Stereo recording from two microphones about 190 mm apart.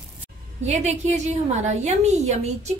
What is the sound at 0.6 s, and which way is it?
A woman's voice, 35° right (ahead or behind).